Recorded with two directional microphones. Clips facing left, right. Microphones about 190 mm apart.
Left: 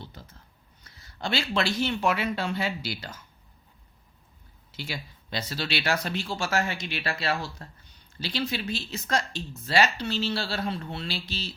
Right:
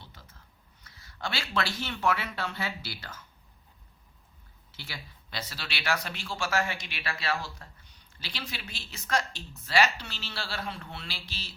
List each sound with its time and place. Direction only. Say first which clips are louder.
0.9 s speech: left 6 dB; 25° left (ahead or behind)
4.8 s speech: left 8 dB; 20° left (ahead or behind)